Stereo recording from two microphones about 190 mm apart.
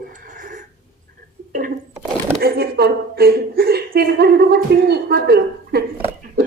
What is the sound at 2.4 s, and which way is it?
A woman's voice, 55° right (ahead or behind).